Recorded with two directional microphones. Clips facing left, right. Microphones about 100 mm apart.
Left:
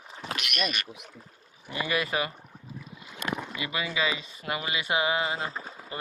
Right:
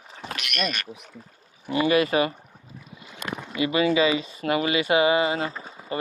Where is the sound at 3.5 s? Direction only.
70° right (ahead or behind).